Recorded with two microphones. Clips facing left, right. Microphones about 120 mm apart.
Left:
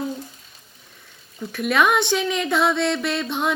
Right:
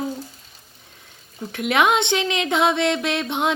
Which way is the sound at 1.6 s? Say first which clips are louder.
Even; 20° right (ahead or behind).